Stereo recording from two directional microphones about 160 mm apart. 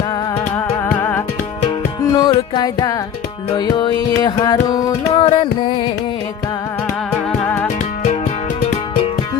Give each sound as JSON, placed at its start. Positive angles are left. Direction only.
{"t": 0.5, "sound": "music", "side_deg": 15}
{"t": 2.1, "sound": "carnatic music", "side_deg": 25}
{"t": 3.5, "sound": "music", "side_deg": 25}
{"t": 5.1, "sound": "carnatic music", "side_deg": 40}
{"t": 7.4, "sound": "music", "side_deg": 10}